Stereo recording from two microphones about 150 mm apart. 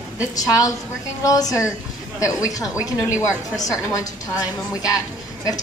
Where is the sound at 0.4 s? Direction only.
25° left (ahead or behind).